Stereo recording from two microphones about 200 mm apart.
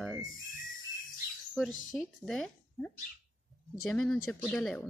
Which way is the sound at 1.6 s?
80° left.